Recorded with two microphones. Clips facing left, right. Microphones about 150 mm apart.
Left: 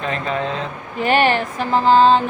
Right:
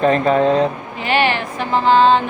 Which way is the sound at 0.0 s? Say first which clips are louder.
Right 9 dB; 40° right (ahead or behind).